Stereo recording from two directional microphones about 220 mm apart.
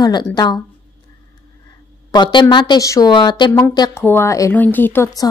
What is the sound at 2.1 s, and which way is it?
Speech, 20° left (ahead or behind).